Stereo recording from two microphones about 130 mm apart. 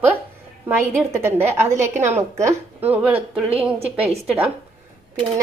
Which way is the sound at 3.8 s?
50° right (ahead or behind).